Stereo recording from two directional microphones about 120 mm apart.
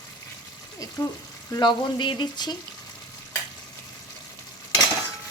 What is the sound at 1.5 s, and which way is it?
Speech, 40° left (ahead or behind).